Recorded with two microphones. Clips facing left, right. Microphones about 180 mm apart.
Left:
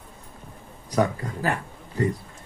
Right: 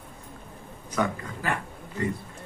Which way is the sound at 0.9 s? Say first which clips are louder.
Left 4 dB; 35° left (ahead or behind).